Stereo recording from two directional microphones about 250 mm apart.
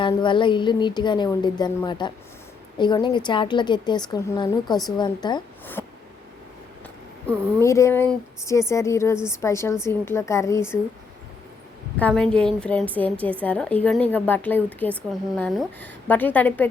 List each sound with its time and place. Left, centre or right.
0.0 s a woman's voice: centre
7.3 s a woman's voice: centre
11.9 s a woman's voice: centre